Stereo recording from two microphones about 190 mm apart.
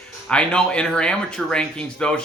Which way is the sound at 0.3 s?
5° left (ahead or behind).